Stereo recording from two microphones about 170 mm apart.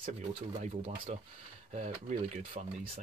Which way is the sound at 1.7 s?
40° right (ahead or behind).